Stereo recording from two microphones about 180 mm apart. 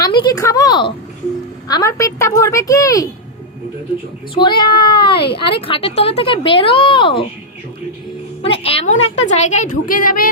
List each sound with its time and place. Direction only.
0.0 s a woman's voice: 25° left (ahead or behind)
4.4 s speech: 25° left (ahead or behind)
8.4 s a woman's voice: 30° left (ahead or behind); by 10.2 s 50° left (ahead or behind)